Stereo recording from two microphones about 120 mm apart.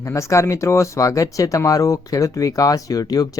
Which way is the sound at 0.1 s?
25° left (ahead or behind).